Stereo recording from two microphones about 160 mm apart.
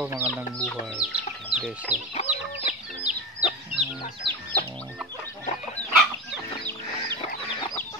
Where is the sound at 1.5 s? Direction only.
5° right (ahead or behind).